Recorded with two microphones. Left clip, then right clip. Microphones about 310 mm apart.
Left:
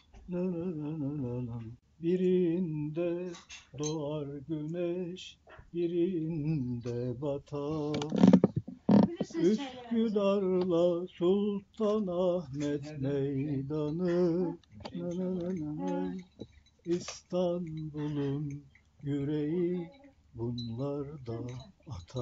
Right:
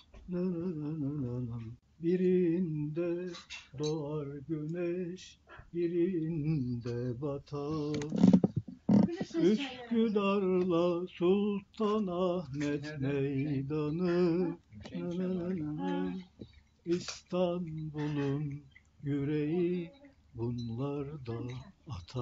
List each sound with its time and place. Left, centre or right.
0.3 s speech: centre
2.0 s speech: centre
3.7 s a sound: centre
8.1 s speech: left
9.4 s speech: centre
17.3 s speech: centre